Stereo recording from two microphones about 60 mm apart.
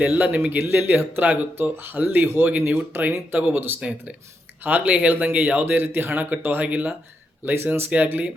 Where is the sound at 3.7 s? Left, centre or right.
Centre.